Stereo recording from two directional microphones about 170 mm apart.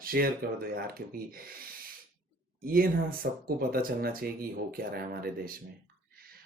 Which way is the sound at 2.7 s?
60° right (ahead or behind).